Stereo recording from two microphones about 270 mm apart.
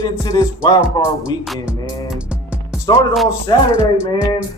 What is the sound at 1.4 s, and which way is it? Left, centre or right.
Speech, centre.